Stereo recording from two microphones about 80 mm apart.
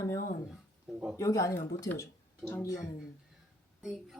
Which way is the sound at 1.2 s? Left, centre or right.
Left.